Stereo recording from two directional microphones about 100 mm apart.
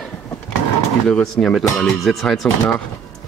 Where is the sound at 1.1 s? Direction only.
5° left (ahead or behind).